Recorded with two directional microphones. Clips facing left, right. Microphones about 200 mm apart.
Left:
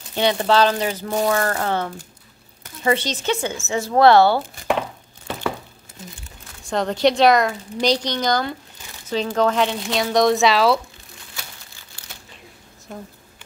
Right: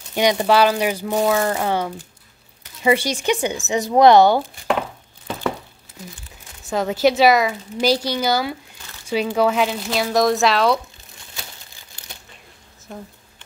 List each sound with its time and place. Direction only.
0.1 s speech: 15° right (ahead or behind)
6.6 s speech: 5° right (ahead or behind)
12.9 s speech: 5° left (ahead or behind)